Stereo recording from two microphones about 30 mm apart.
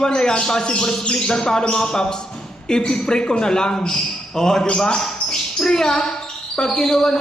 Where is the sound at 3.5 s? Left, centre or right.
Centre.